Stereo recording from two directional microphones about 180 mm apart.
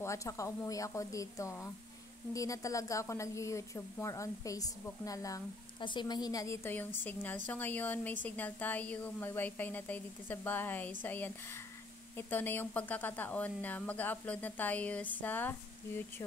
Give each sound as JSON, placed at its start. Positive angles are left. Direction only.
{"t": 0.0, "sound": "a woman's voice", "side_deg": 15}